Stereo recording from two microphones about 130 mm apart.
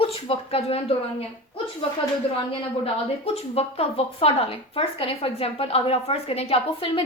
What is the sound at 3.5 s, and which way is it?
A woman's voice, 50° left (ahead or behind).